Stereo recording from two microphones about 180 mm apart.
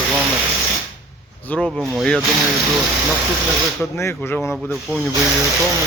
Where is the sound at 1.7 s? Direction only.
Centre (ahead or behind).